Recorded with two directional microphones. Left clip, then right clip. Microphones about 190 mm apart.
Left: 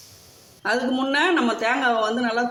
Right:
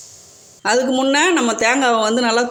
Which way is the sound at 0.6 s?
35° right (ahead or behind).